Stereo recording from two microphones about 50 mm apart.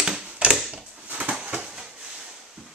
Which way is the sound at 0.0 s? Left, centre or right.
Centre.